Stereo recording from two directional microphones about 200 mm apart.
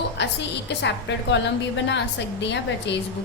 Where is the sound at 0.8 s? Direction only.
65° left (ahead or behind).